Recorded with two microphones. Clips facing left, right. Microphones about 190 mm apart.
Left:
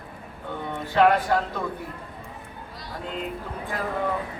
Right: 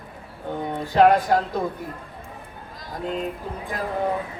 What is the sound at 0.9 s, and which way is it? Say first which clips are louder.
Speech: right 3 dB; 40° right (ahead or behind).